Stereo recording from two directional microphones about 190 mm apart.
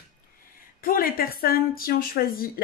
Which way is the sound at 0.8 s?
50° left (ahead or behind).